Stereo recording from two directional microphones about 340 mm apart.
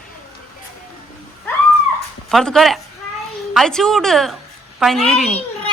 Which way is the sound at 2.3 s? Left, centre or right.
Centre.